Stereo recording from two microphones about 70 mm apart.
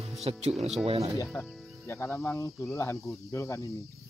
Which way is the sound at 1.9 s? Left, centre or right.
Left.